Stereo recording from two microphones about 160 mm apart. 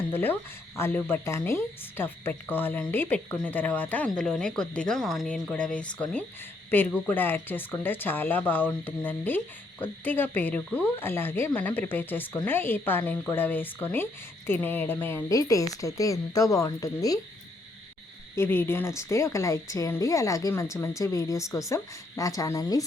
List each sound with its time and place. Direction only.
0.1 s a woman's voice: 15° left (ahead or behind)
18.3 s speech: 15° left (ahead or behind)